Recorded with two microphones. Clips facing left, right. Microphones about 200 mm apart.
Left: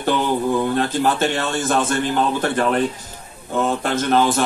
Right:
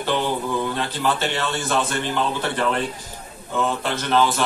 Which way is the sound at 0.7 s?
45° left (ahead or behind).